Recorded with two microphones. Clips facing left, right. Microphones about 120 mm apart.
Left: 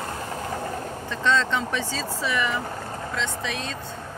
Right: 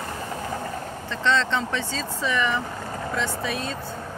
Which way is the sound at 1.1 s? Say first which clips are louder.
Even; 10° left (ahead or behind).